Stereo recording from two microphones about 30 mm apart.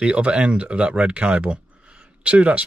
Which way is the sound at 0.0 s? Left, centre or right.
Right.